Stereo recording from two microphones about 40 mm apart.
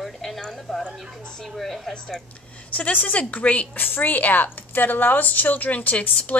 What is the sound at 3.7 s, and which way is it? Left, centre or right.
A woman's voice, left.